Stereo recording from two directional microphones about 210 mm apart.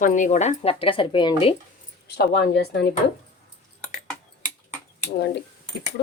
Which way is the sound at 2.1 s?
50° left (ahead or behind).